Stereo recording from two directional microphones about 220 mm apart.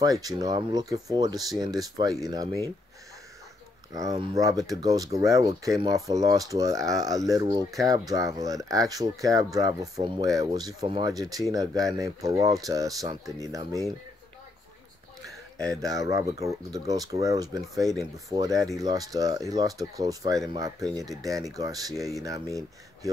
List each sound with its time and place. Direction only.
0.0 s speech: 15° right (ahead or behind)
4.1 s speech: 20° right (ahead or behind)
15.6 s speech: 15° right (ahead or behind)